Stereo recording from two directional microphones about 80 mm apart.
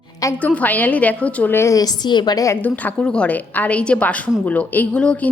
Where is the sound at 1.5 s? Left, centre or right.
Left.